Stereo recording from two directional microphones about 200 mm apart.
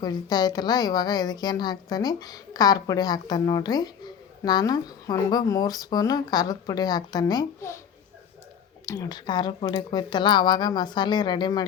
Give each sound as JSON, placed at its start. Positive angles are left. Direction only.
{"t": 0.0, "sound": "a woman's voice", "side_deg": 20}
{"t": 8.9, "sound": "a woman's voice", "side_deg": 20}